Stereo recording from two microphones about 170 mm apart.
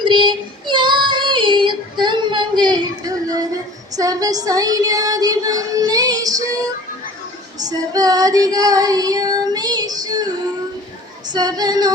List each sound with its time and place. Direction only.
0.0 s child singing: 25° right (ahead or behind)
7.6 s child singing: 20° right (ahead or behind)
11.3 s child singing: 25° right (ahead or behind)